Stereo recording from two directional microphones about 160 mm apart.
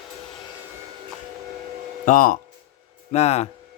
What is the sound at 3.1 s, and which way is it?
Speech, 40° left (ahead or behind).